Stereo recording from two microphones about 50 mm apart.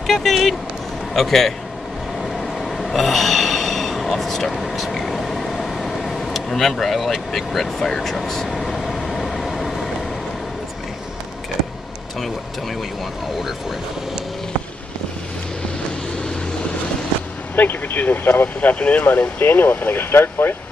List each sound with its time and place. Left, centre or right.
0.0 s speech: centre
2.2 s train: centre
17.6 s speech: left
19.3 s speech: left